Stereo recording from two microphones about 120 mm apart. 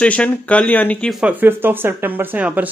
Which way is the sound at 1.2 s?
15° right (ahead or behind).